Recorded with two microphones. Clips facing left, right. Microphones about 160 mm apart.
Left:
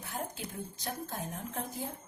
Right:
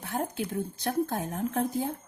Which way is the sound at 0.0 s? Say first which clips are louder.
Right 8 dB; 65° right (ahead or behind).